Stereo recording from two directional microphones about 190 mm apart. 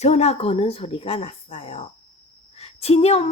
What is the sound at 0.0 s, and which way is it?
Speech, 35° left (ahead or behind).